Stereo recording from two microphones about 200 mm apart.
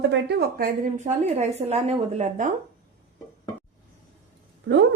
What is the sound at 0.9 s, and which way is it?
Speech, 35° right (ahead or behind).